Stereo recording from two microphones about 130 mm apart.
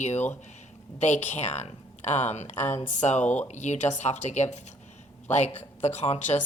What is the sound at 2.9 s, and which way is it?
Speech, 60° left (ahead or behind).